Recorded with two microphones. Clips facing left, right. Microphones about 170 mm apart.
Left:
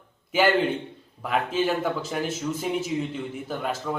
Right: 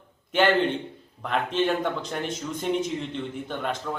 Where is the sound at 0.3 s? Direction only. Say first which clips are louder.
Even; 5° left (ahead or behind).